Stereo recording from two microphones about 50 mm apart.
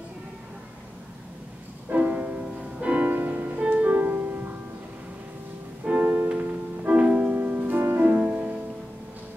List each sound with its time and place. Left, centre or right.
1.9 s music: right
3.9 s music: right
5.9 s music: right
6.2 s music: right
7.1 s music: centre
7.3 s music: right